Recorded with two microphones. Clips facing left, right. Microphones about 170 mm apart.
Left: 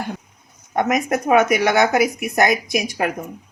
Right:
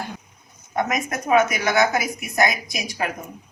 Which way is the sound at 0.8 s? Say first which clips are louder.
Left 5 dB; 60° left (ahead or behind).